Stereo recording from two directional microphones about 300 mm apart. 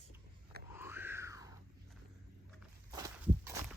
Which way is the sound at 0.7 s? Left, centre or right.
Centre.